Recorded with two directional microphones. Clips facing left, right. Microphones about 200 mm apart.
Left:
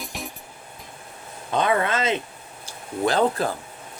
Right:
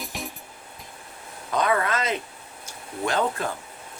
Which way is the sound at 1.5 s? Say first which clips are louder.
Left 2 dB; 25° left (ahead or behind).